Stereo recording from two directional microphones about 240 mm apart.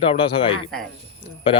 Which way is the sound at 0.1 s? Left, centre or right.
Left.